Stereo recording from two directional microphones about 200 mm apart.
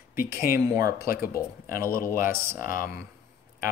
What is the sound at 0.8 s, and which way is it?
Speech, 50° left (ahead or behind).